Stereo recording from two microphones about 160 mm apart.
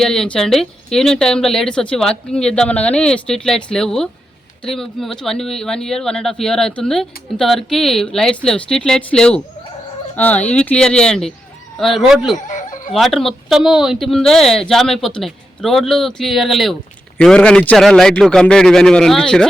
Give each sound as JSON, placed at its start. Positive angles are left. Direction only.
{"t": 0.0, "sound": "speech", "side_deg": 5}
{"t": 12.5, "sound": "chicken", "side_deg": 50}
{"t": 12.9, "sound": "speech", "side_deg": 0}